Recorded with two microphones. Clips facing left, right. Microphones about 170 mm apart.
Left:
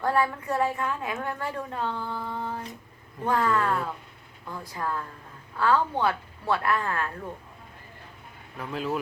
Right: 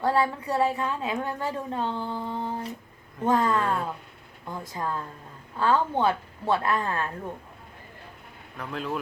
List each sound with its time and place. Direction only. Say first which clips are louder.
0.0 s a woman's voice: right 1 dB; 15° right (ahead or behind)
8.5 s speech: left 2 dB; 5° left (ahead or behind)